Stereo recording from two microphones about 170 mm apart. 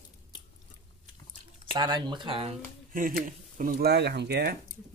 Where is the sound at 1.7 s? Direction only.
25° right (ahead or behind).